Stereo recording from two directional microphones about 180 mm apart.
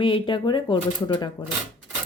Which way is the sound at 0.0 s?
25° left (ahead or behind).